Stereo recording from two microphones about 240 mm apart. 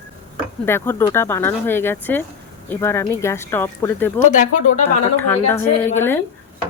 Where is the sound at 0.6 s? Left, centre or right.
Centre.